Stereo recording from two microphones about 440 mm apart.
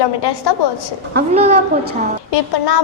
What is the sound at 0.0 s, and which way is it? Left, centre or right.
Speech, left.